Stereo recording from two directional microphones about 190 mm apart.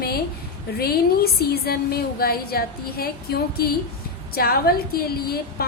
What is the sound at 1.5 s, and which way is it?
A woman's voice, 55° left (ahead or behind).